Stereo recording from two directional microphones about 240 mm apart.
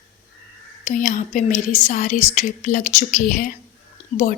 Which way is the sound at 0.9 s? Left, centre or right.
Left.